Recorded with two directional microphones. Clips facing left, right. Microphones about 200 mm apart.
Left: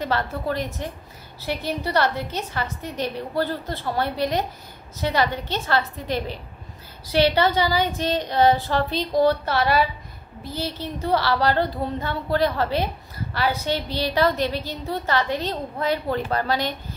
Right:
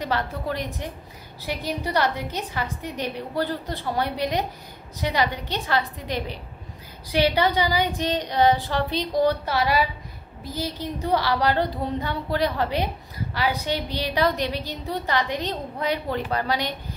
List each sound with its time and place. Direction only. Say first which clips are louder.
0.0 s speech: left 2 dB; 15° right (ahead or behind)